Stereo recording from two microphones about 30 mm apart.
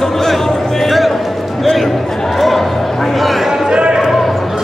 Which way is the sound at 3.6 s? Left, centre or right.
Right.